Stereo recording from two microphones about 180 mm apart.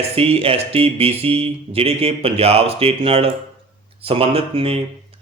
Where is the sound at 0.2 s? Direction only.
30° right (ahead or behind).